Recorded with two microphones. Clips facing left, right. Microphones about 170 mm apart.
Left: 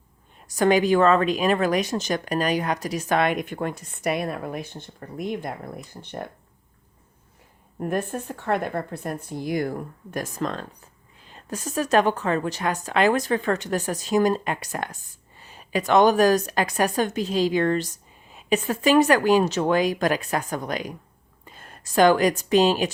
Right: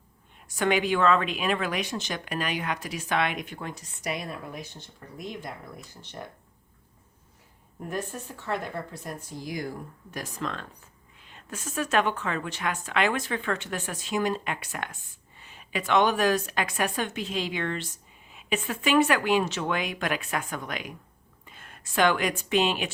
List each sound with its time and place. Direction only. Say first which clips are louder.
0.4 s a woman's voice: left 6 dB; 40° left (ahead or behind); by 6.2 s 55° left (ahead or behind)
7.8 s a woman's voice: left 7 dB; 55° left (ahead or behind); by 22.9 s 40° left (ahead or behind)